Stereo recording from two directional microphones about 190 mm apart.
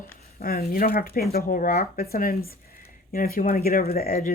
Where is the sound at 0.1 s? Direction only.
50° left (ahead or behind).